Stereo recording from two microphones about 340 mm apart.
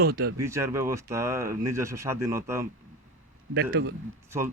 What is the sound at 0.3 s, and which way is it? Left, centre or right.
Speech, centre.